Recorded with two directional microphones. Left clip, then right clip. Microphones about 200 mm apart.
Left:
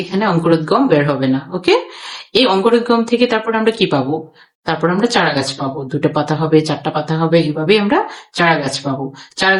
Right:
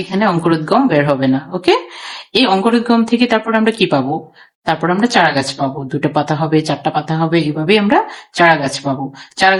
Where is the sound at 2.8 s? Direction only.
30° right (ahead or behind).